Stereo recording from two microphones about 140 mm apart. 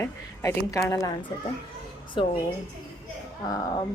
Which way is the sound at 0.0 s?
20° left (ahead or behind).